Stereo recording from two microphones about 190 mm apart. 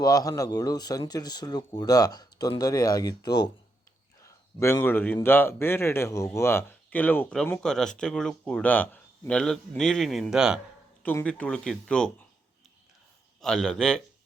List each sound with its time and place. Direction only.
0.0 s a man's voice: 20° left (ahead or behind); by 10.6 s 5° right (ahead or behind)
11.0 s speech: 10° left (ahead or behind)
13.4 s speech: 5° left (ahead or behind)